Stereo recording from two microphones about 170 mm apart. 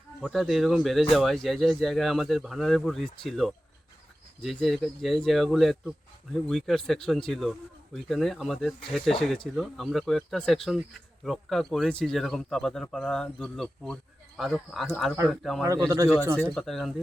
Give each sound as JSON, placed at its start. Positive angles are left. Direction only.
{"t": 0.2, "sound": "speech", "side_deg": 0}
{"t": 15.6, "sound": "speech", "side_deg": -20}
{"t": 16.6, "sound": "speech", "side_deg": 0}